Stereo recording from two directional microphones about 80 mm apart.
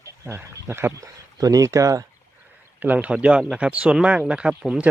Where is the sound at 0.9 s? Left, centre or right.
Right.